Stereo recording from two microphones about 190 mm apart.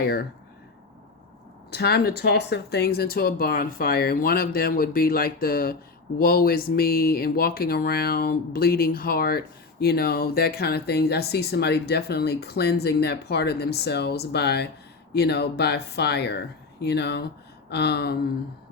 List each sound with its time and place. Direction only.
1.7 s speech: 55° left (ahead or behind)